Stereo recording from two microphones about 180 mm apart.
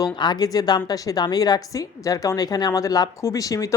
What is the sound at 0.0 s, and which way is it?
Speech, 20° left (ahead or behind).